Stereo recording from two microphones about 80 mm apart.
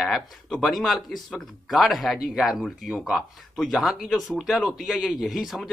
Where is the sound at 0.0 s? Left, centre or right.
Centre.